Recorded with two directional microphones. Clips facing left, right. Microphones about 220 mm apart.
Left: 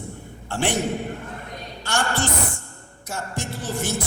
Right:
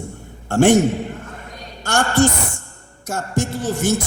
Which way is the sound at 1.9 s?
45° right (ahead or behind).